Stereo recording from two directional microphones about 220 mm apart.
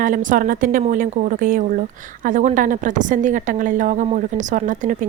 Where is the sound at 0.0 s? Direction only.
35° right (ahead or behind).